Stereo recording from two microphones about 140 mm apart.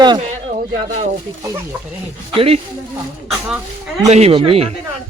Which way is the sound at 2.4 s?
45° right (ahead or behind).